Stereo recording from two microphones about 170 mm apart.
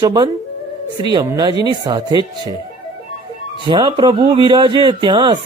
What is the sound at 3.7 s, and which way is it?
Speech, 25° right (ahead or behind).